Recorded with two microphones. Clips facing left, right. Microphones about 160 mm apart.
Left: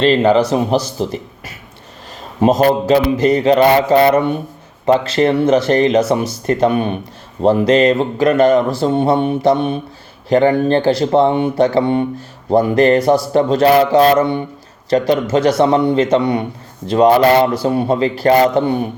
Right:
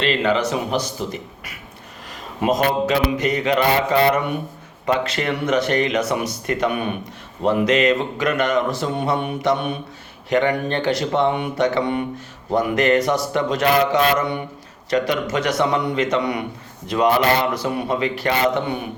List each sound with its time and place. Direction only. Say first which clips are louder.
0.0 s speech: left 8 dB; 35° left (ahead or behind)